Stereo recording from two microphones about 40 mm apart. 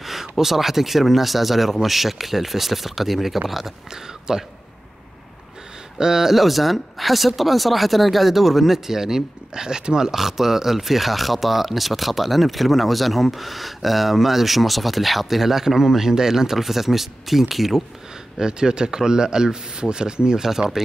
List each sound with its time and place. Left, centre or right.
0.0 s speech: centre
5.9 s speech: centre
18.4 s speech: centre